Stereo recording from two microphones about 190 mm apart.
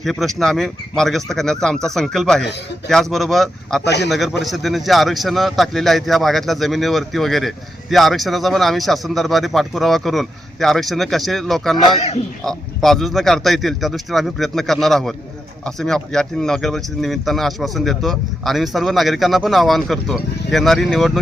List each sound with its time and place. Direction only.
0.0 s a man's voice: centre (ahead or behind)
3.8 s a man's voice: 65° left (ahead or behind)
4.1 s a man's voice: centre (ahead or behind)
11.8 s a man's voice: 30° left (ahead or behind)
12.4 s a man's voice: centre (ahead or behind)